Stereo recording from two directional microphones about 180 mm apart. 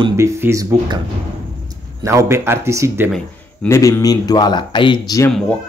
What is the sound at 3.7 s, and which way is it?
Speech, 15° left (ahead or behind).